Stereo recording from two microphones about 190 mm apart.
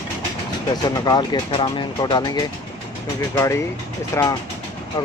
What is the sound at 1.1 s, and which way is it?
Speech, 25° left (ahead or behind).